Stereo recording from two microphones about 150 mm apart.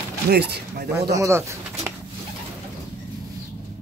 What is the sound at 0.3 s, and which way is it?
Speech, 90° right.